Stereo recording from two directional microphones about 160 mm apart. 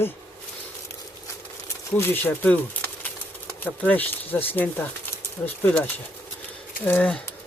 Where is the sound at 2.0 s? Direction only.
10° left (ahead or behind).